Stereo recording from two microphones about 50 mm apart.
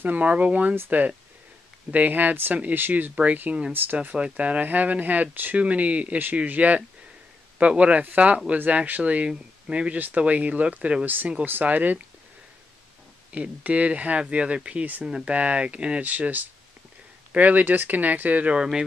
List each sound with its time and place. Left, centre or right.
0.0 s speech: right
3.7 s speech: right
9.9 s speech: right
11.4 s speech: right
13.3 s speech: right
18.5 s speech: centre